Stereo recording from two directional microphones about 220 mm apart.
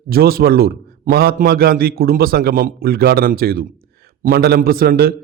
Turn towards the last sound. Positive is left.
turn(degrees=-45)  # may be behind; listen again after turning